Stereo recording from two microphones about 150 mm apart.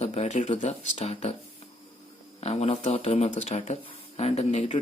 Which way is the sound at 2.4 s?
45° left (ahead or behind).